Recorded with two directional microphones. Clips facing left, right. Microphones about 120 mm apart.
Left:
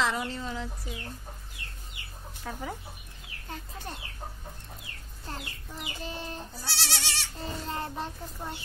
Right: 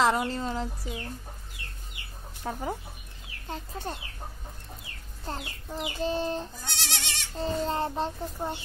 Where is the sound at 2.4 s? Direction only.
30° right (ahead or behind).